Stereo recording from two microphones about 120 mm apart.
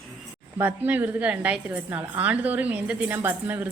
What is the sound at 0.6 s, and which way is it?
A woman's voice, 15° right (ahead or behind).